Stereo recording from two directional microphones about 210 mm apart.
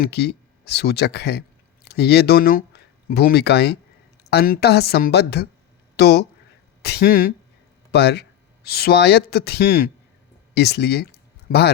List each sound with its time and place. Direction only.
0.0 s speech: 50° left (ahead or behind)